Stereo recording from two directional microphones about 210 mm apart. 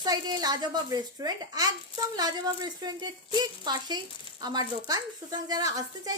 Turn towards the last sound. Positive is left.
turn(degrees=-20)  # may be behind; listen again after turning